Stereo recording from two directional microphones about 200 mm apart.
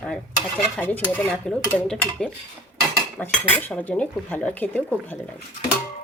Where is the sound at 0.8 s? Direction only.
10° left (ahead or behind).